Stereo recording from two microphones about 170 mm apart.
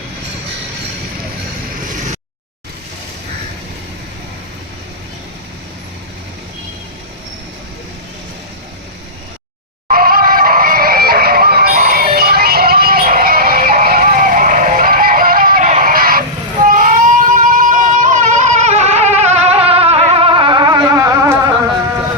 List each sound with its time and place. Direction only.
9.9 s music: 60° right (ahead or behind)
16.6 s vehicle: 55° right (ahead or behind); by 21.5 s 15° right (ahead or behind)